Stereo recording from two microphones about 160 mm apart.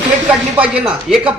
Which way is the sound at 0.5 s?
5° right (ahead or behind).